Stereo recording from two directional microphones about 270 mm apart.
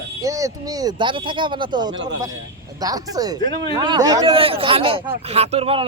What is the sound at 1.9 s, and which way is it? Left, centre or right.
Speech, right.